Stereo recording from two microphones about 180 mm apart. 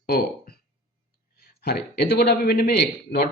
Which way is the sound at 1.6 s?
65° left (ahead or behind).